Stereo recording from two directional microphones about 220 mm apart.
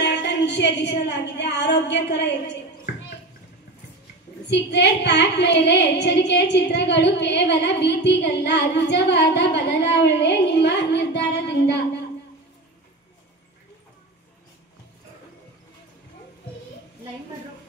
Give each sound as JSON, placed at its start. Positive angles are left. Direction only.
{"t": 0.0, "sound": "a woman's voice", "side_deg": 50}
{"t": 4.5, "sound": "a woman's voice", "side_deg": 50}